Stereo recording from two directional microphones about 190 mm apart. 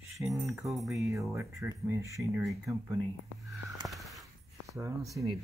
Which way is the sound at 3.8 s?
Centre (ahead or behind).